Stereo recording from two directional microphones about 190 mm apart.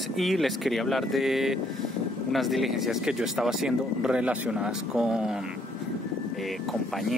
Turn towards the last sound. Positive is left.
turn(degrees=0)  # may be behind; listen again after turning